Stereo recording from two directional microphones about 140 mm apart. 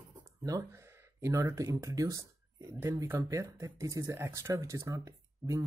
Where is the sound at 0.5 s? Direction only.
20° right (ahead or behind).